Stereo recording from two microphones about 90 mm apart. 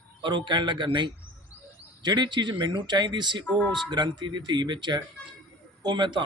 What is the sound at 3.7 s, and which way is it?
Speech, 55° right (ahead or behind).